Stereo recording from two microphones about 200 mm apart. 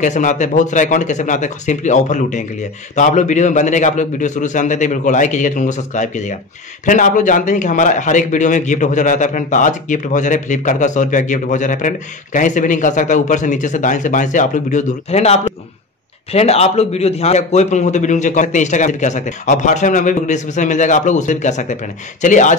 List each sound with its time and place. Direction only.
0.0 s a man's voice: 40° left (ahead or behind)